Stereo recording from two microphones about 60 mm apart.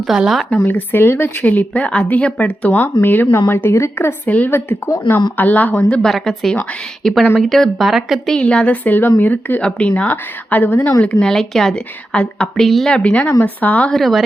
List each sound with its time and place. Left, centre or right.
0.0 s speech: centre
0.7 s speech: left
1.5 s speech: left
3.7 s a woman's voice: left
4.3 s speech: left
5.7 s a woman's voice: centre
8.3 s speech: centre
9.6 s speech: centre
11.2 s a woman's voice: centre
12.5 s speech: centre
12.9 s speech: left
13.9 s speech: centre